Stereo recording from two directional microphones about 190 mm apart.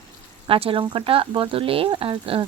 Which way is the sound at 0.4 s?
30° right (ahead or behind).